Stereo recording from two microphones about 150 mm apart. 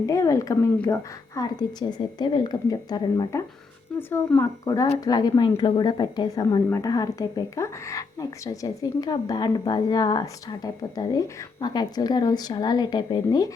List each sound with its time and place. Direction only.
0.0 s a woman's voice: 20° left (ahead or behind)